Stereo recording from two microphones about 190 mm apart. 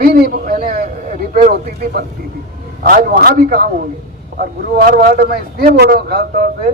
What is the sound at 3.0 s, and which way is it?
Speech, 50° right (ahead or behind).